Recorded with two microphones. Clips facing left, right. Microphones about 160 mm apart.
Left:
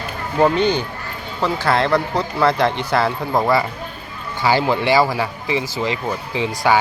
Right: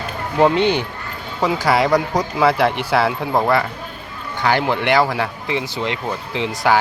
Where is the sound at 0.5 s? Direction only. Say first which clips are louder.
Right 1 dB; 90° right.